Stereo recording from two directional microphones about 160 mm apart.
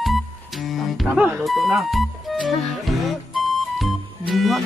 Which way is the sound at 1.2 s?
10° right (ahead or behind).